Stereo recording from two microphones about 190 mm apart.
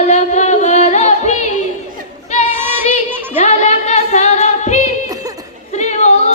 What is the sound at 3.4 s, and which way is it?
Music, 35° left (ahead or behind).